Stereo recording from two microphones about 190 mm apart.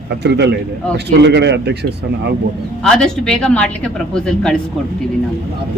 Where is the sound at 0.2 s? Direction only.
60° right (ahead or behind).